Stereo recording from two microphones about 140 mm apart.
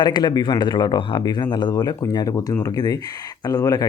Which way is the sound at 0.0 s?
30° left (ahead or behind).